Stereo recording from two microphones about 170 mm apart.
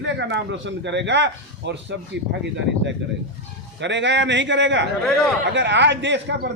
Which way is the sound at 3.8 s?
90° right.